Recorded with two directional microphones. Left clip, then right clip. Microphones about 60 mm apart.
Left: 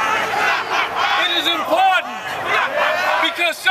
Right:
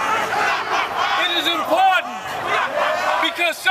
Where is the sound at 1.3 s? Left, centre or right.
Centre.